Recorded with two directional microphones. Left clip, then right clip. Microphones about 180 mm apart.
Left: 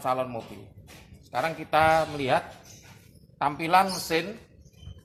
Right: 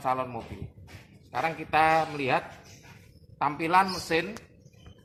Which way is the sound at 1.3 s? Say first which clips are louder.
Left 1 dB; 40° left (ahead or behind).